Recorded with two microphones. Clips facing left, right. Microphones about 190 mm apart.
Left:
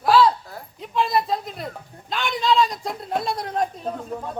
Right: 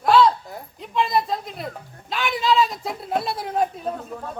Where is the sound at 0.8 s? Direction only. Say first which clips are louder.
Even; centre (ahead or behind).